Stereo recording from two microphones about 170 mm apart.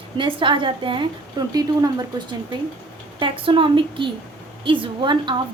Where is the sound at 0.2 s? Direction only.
30° right (ahead or behind).